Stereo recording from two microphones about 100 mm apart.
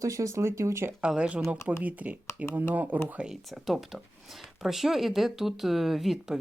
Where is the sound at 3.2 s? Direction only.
5° right (ahead or behind).